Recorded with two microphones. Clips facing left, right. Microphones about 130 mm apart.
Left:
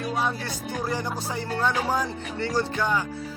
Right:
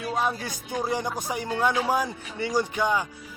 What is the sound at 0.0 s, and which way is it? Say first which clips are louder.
Speech: even; 10° right (ahead or behind).